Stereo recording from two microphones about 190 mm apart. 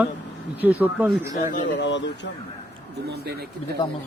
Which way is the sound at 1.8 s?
70° left (ahead or behind).